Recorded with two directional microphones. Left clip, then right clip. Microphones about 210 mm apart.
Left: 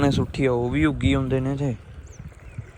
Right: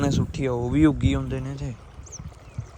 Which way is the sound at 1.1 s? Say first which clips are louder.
Left 6 dB; 10° right (ahead or behind).